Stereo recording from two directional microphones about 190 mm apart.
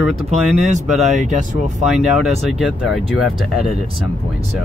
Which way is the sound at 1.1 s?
40° right (ahead or behind).